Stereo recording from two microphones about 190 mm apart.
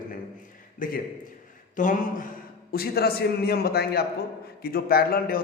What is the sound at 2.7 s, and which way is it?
A man's voice, 55° left (ahead or behind).